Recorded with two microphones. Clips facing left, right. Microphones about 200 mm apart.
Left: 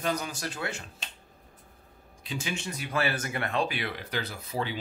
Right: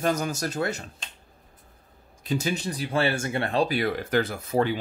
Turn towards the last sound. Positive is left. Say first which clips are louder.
# right 9 dB
turn(degrees=-50)  # may be behind; listen again after turning